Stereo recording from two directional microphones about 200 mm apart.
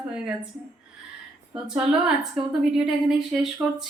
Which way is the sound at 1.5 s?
5° right (ahead or behind).